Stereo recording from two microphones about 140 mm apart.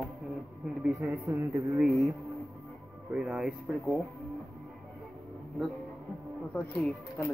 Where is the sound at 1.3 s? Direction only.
20° right (ahead or behind).